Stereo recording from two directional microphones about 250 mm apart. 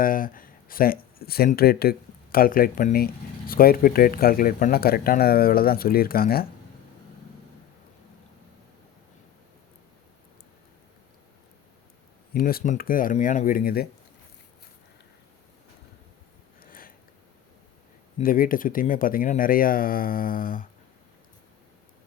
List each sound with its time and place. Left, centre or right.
0.0 s speech: left
12.3 s speech: left
16.6 s a sound: left
18.2 s speech: left